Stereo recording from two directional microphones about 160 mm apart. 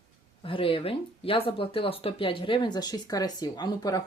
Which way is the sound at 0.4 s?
35° left (ahead or behind).